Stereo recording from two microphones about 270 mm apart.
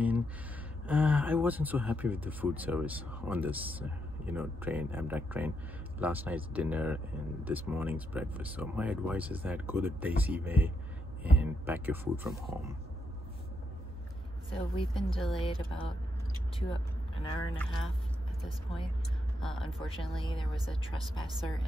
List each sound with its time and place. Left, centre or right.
0.8 s speech: centre
14.5 s speech: centre
16.5 s vehicle: centre
19.4 s speech: centre
19.8 s speech: centre